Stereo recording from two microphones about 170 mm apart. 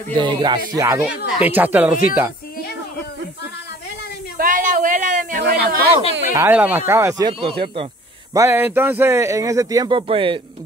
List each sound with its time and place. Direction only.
0.1 s speech: 25° right (ahead or behind); by 1.9 s 10° right (ahead or behind)
4.4 s a sound: 50° right (ahead or behind)
5.4 s speech: 70° right (ahead or behind)
6.3 s speech: 10° right (ahead or behind)
7.2 s speech: 30° right (ahead or behind)
8.3 s speech: 15° right (ahead or behind); by 10.4 s 30° right (ahead or behind)